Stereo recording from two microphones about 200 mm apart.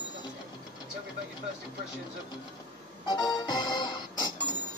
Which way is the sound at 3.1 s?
20° left (ahead or behind).